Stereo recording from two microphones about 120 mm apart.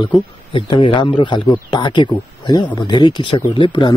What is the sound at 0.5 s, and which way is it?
Speech, 45° left (ahead or behind).